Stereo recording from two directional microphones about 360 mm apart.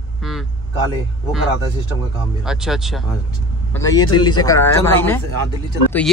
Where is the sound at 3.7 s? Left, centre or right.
Centre.